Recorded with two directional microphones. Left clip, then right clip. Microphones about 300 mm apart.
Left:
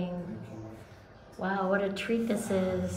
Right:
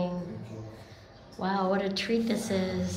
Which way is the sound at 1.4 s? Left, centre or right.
Centre.